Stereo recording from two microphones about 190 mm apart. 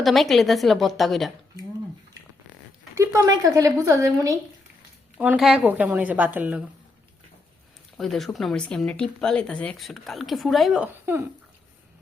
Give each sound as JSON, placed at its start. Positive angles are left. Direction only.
{"t": 0.0, "sound": "speech", "side_deg": 0}
{"t": 2.9, "sound": "speech", "side_deg": -15}
{"t": 5.1, "sound": "speech", "side_deg": -5}
{"t": 7.9, "sound": "speech", "side_deg": 0}
{"t": 11.0, "sound": "speech", "side_deg": -10}